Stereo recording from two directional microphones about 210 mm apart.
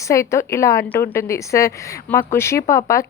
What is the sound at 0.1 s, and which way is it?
A woman's voice, 15° left (ahead or behind).